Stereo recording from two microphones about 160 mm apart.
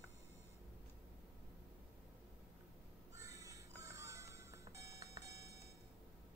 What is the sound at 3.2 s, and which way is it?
Music, 20° right (ahead or behind).